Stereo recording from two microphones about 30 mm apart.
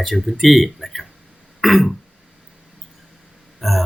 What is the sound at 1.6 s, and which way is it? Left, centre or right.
Throat clearing, centre.